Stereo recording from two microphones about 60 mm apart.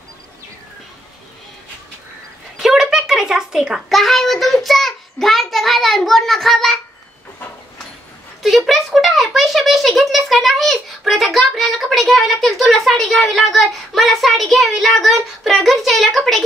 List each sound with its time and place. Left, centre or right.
2.6 s a sound: centre
3.9 s a child's voice: centre
8.4 s speech: centre